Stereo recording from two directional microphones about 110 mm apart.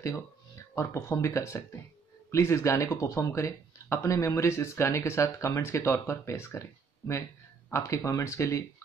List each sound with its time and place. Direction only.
0.7 s speech: 25° left (ahead or behind)
7.7 s speech: 25° left (ahead or behind)